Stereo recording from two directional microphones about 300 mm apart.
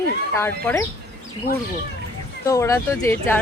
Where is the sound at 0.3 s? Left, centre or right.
Centre.